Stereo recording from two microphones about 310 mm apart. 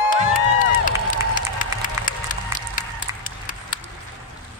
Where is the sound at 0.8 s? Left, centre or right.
Left.